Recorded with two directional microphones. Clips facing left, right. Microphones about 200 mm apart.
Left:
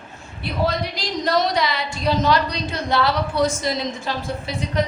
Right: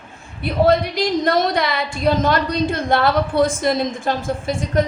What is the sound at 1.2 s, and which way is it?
A woman's voice, 55° right (ahead or behind).